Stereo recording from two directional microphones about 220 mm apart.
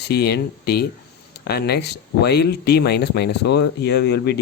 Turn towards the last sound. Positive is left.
turn(degrees=50)  # may be behind; listen again after turning